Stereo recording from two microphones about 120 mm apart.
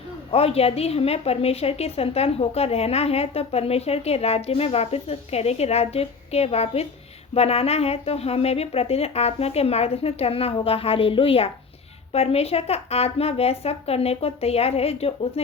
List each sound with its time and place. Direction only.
0.3 s a woman's voice: 55° left (ahead or behind)